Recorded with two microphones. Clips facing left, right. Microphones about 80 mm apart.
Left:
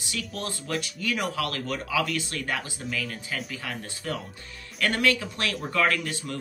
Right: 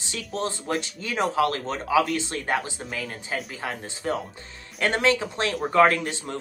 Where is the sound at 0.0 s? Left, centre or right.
Right.